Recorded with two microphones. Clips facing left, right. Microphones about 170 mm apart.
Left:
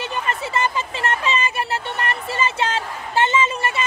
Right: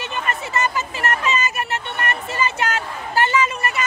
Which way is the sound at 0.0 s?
30° left (ahead or behind).